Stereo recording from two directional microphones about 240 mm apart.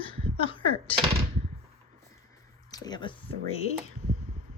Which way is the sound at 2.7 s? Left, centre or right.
Centre.